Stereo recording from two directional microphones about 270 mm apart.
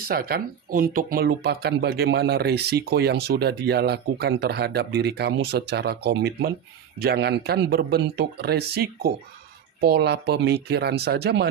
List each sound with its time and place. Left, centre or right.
0.0 s speech: right